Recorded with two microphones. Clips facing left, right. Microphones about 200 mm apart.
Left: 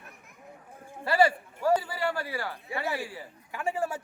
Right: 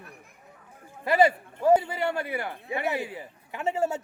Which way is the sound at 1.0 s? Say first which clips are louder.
Right 2 dB; 20° right (ahead or behind).